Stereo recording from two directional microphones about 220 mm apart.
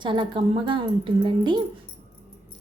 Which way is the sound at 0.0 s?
25° right (ahead or behind).